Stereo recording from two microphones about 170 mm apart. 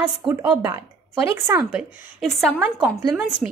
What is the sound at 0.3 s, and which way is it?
A woman's voice, 15° right (ahead or behind).